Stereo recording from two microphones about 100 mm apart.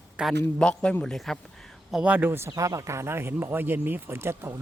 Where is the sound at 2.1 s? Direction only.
20° right (ahead or behind).